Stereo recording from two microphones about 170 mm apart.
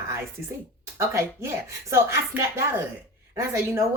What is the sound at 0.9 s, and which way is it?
A woman's voice, 15° right (ahead or behind).